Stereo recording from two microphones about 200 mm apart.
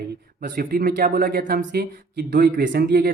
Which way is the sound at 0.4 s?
45° right (ahead or behind).